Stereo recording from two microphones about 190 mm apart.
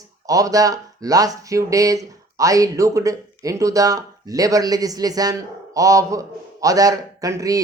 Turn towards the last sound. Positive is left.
turn(degrees=-15)  # may be behind; listen again after turning